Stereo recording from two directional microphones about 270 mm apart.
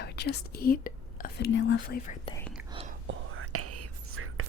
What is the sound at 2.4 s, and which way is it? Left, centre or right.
Whispering, centre.